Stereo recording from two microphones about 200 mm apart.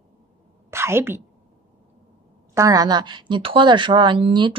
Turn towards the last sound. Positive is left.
turn(degrees=-25)  # may be behind; listen again after turning